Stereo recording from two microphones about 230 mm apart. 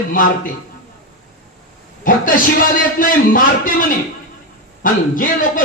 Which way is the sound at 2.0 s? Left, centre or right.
Left.